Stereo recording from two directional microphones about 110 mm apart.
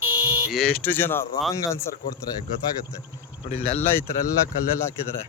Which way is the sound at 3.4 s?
75° left (ahead or behind).